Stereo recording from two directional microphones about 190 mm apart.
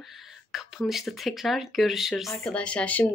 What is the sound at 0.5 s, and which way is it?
Speech, centre (ahead or behind).